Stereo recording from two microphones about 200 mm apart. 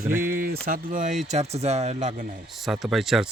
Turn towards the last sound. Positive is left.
turn(degrees=0)  # may be behind; listen again after turning